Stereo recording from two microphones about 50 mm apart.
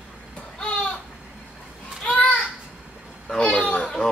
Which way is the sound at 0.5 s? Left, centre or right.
Left.